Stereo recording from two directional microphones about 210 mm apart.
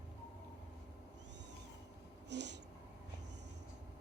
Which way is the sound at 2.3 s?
55° right (ahead or behind).